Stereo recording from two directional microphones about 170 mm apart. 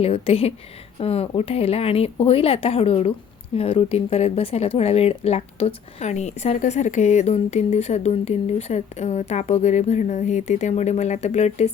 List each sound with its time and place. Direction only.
0.0 s speech: 35° left (ahead or behind)